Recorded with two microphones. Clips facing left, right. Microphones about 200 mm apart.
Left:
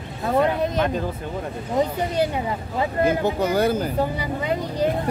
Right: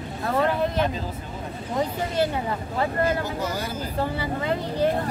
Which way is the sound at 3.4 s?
60° left (ahead or behind).